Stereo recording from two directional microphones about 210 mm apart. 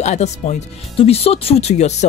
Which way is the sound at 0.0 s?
35° left (ahead or behind).